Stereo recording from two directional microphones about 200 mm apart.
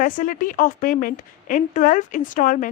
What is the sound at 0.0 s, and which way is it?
A woman's voice, 40° left (ahead or behind).